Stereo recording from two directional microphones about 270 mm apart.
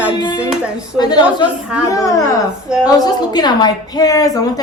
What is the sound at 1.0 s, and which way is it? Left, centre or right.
A woman's voice, centre.